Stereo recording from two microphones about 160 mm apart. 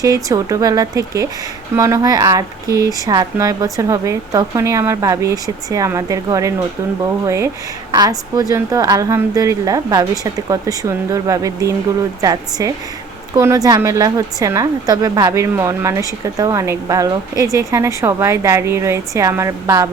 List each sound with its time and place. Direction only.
0.0 s a woman's voice: 20° right (ahead or behind)